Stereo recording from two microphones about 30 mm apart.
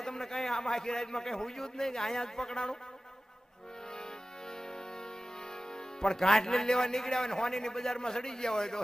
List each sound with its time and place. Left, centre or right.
0.0 s a man's voice: centre
3.9 s music: left
5.5 s speech: left
7.9 s a man's voice: left